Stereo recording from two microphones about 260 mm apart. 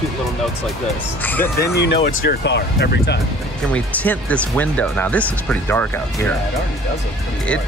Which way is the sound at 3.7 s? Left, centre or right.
Centre.